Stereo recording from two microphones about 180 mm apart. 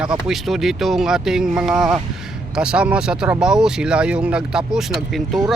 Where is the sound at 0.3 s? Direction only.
Centre (ahead or behind).